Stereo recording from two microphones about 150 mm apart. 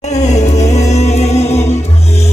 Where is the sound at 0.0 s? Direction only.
50° left (ahead or behind).